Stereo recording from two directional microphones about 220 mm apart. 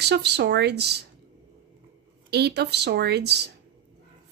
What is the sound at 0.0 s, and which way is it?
A woman's voice, 50° right (ahead or behind).